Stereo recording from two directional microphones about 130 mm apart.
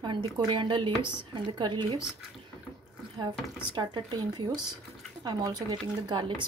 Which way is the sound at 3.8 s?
35° right (ahead or behind).